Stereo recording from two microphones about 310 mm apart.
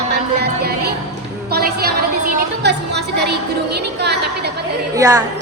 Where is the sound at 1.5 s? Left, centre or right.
Right.